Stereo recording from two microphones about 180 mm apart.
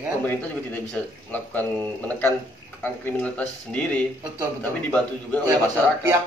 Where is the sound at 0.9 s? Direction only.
10° left (ahead or behind).